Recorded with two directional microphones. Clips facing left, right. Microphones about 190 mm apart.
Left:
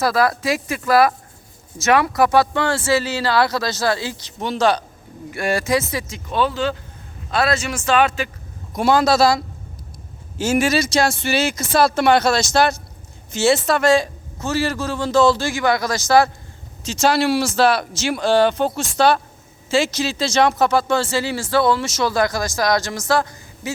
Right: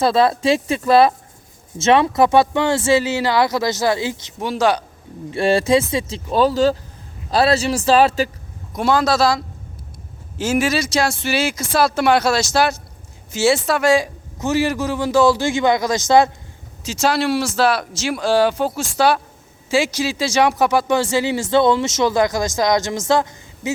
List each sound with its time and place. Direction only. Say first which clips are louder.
0.0 s a man's voice: right 3 dB; 25° right (ahead or behind)
5.3 s speech: right 4 dB; 30° right (ahead or behind)
8.7 s a man's voice: left 1 dB; centre (ahead or behind); by 16.3 s 20° right (ahead or behind)
16.8 s speech: left 1 dB; centre (ahead or behind); by 23.7 s 20° right (ahead or behind)